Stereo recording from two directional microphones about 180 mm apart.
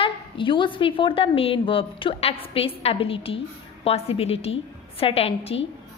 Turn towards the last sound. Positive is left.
turn(degrees=35)  # may be behind; listen again after turning